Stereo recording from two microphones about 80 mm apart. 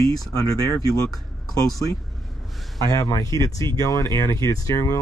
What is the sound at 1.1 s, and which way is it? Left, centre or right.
Speech, centre.